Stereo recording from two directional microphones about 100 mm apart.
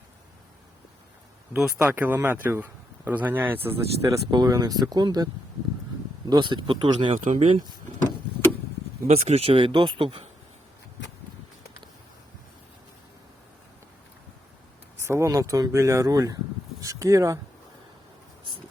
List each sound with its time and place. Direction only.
1.8 s speech: 20° right (ahead or behind)
4.3 s speech: 40° right (ahead or behind); by 7.6 s 65° right (ahead or behind)
9.0 s speech: 90° right; by 10.2 s 65° right (ahead or behind)
15.0 s speech: 30° right (ahead or behind)